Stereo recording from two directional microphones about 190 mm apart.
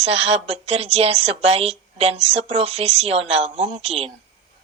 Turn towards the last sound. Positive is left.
turn(degrees=-30)  # may be behind; listen again after turning